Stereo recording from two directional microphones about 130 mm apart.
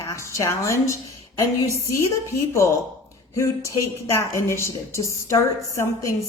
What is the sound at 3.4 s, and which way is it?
A woman's voice, 20° left (ahead or behind).